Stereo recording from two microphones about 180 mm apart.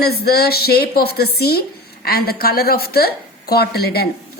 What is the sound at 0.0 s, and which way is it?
A woman's voice, 60° left (ahead or behind).